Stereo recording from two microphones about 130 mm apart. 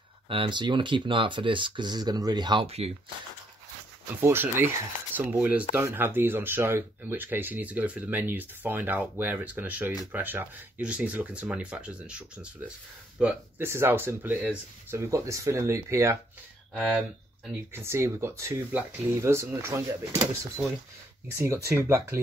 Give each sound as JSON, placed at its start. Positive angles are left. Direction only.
{"t": 0.3, "sound": "speech", "side_deg": -40}
{"t": 2.6, "sound": "speech", "side_deg": -50}
{"t": 4.1, "sound": "speech", "side_deg": -15}
{"t": 13.2, "sound": "speech", "side_deg": -20}
{"t": 17.7, "sound": "speech", "side_deg": -20}